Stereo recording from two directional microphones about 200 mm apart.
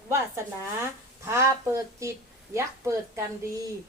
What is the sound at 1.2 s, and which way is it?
Speech, 15° right (ahead or behind).